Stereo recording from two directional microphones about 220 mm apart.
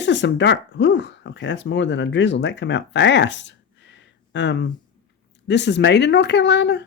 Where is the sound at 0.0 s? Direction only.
55° left (ahead or behind).